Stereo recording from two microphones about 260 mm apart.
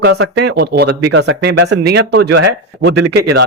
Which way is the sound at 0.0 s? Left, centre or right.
Right.